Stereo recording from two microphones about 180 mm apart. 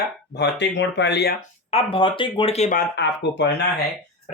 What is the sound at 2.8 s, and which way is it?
Speech, 70° left (ahead or behind).